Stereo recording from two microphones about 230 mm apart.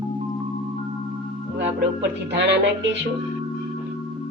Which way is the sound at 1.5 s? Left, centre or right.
Right.